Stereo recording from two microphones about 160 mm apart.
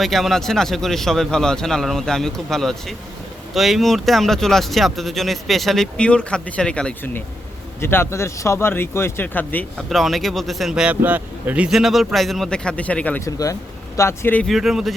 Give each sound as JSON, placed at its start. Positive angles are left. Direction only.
{"t": 0.0, "sound": "speech", "side_deg": 0}
{"t": 14.5, "sound": "speech", "side_deg": 0}